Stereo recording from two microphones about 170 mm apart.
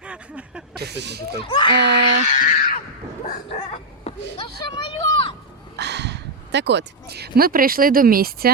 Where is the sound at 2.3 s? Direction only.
45° left (ahead or behind).